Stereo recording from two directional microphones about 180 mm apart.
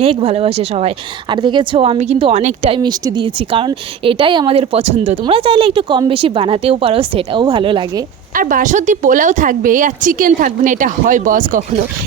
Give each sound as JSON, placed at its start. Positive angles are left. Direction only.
{"t": 0.0, "sound": "speech", "side_deg": -35}
{"t": 8.4, "sound": "a woman's voice", "side_deg": -50}